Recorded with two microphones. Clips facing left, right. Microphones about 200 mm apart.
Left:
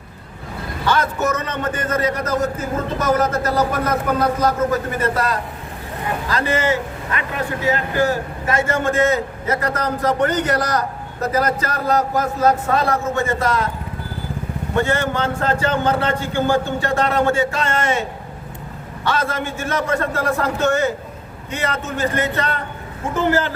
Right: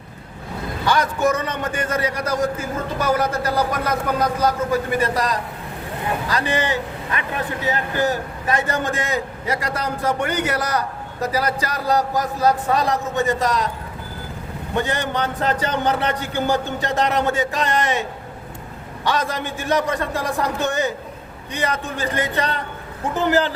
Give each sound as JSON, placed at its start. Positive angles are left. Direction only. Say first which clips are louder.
{"t": 0.9, "sound": "a man's voice", "louder": "even", "side_deg": -15}
{"t": 14.8, "sound": "a man's voice", "louder": "left 3 dB", "side_deg": -15}
{"t": 19.0, "sound": "a man's voice", "louder": "left 1 dB", "side_deg": -15}